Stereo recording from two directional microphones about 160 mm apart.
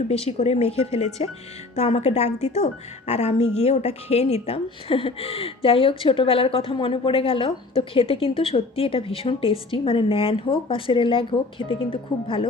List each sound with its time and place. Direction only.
0.1 s a woman's voice: 40° left (ahead or behind)